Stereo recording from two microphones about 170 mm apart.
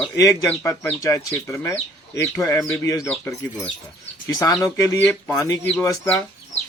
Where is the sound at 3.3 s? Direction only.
Centre (ahead or behind).